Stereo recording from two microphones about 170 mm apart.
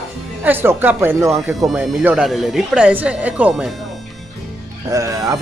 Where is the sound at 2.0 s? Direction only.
Centre (ahead or behind).